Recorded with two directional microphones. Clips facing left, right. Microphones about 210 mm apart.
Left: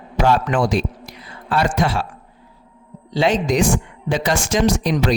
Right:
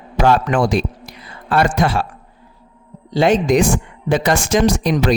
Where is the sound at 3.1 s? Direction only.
50° right (ahead or behind).